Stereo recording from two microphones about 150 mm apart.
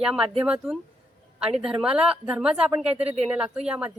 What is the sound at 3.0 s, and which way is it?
Speech, 40° right (ahead or behind).